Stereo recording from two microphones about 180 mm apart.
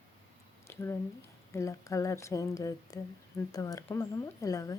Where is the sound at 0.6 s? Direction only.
15° left (ahead or behind).